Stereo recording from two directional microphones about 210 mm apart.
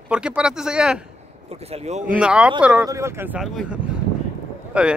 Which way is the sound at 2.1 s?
5° right (ahead or behind).